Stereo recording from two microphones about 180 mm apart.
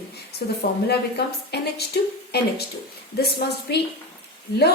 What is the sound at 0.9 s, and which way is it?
A woman's voice, 65° left (ahead or behind).